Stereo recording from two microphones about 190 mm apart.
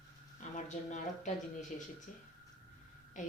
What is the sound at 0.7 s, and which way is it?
Speech, 40° left (ahead or behind).